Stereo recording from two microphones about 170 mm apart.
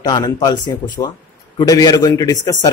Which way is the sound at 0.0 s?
25° left (ahead or behind).